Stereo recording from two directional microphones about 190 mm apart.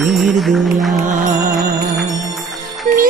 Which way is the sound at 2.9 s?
45° right (ahead or behind).